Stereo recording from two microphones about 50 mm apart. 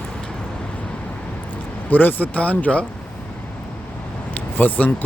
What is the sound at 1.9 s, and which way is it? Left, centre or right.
Speech, left.